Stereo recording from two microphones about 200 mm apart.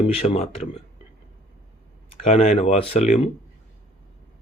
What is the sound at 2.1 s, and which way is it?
Speech, 30° left (ahead or behind).